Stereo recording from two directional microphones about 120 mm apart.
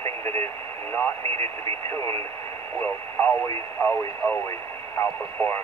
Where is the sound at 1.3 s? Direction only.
55° right (ahead or behind).